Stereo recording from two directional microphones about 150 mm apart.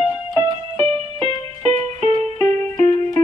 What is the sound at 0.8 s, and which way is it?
Music, 40° right (ahead or behind).